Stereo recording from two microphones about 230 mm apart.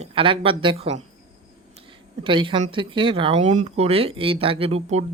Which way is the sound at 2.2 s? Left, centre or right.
Right.